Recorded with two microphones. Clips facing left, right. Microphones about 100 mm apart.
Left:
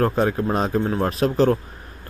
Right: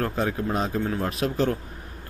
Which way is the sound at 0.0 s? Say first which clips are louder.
Left 6 dB; 40° left (ahead or behind).